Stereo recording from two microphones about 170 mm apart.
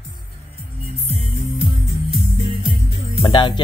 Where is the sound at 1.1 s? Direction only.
35° right (ahead or behind).